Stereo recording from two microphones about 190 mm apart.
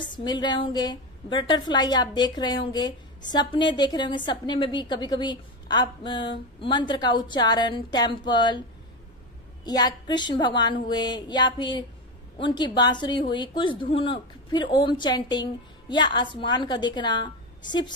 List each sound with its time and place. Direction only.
0.0 s a woman's voice: 25° left (ahead or behind)
9.7 s a woman's voice: 20° left (ahead or behind)